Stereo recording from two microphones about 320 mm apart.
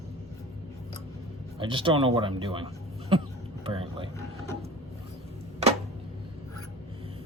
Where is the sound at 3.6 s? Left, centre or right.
Centre.